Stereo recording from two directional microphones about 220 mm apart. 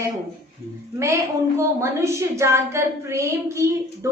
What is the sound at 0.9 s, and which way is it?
A woman's voice, 15° right (ahead or behind).